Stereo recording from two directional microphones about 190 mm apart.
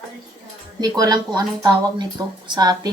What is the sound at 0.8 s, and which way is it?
Speech, 20° right (ahead or behind).